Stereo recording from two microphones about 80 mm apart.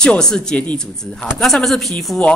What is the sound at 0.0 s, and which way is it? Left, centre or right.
Speech, centre.